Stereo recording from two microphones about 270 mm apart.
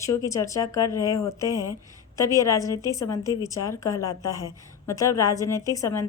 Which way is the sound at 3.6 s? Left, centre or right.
Centre.